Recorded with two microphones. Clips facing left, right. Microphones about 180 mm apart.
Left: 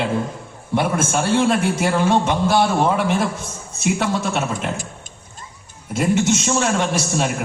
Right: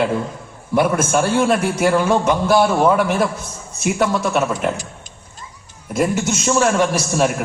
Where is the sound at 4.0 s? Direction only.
50° right (ahead or behind).